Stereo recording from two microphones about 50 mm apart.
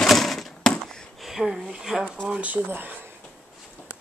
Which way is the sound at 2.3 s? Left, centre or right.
Right.